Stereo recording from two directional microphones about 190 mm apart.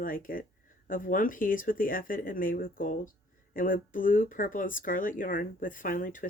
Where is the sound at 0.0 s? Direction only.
45° left (ahead or behind).